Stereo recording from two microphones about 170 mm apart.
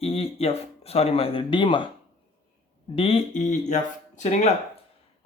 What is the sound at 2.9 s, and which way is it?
Speech, 35° left (ahead or behind).